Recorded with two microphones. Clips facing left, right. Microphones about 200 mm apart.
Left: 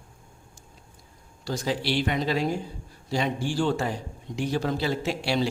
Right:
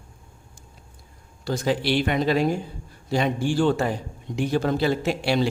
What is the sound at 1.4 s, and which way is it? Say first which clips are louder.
Speech: right 4 dB; 55° right (ahead or behind).